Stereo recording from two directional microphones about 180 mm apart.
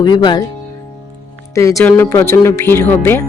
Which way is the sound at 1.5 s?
15° left (ahead or behind).